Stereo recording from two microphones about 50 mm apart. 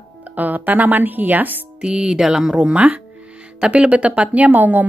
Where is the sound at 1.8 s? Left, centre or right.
Centre.